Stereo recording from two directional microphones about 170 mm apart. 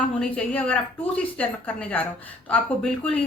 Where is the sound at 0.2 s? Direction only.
5° left (ahead or behind).